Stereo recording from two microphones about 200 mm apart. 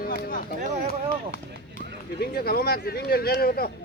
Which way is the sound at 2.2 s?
50° left (ahead or behind).